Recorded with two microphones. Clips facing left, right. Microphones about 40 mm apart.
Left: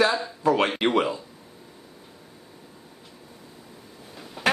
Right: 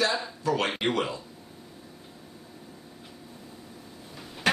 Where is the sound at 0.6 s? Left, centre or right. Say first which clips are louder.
Left 4 dB; centre.